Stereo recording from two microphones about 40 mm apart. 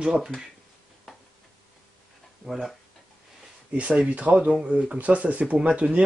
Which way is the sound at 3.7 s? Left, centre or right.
Right.